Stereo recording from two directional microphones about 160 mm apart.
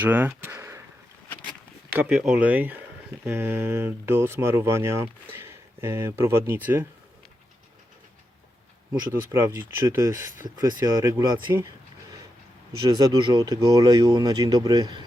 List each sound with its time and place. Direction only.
0.0 s speech: 10° right (ahead or behind)
2.0 s speech: 5° right (ahead or behind)
8.9 s speech: 15° right (ahead or behind)
12.9 s speech: 25° right (ahead or behind)